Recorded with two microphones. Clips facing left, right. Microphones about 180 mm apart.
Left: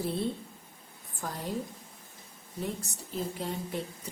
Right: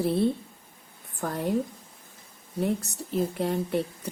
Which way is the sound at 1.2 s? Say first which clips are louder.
Right 8 dB; 60° right (ahead or behind).